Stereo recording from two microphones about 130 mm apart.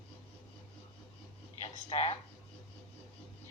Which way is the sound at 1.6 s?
50° left (ahead or behind).